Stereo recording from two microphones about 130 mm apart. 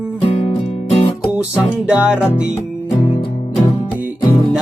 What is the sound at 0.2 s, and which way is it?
Music, 50° left (ahead or behind).